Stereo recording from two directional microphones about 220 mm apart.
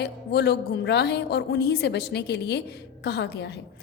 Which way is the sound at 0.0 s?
50° left (ahead or behind).